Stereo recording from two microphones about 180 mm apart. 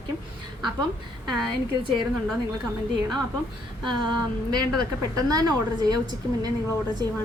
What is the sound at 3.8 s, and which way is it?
A woman's voice, 25° right (ahead or behind).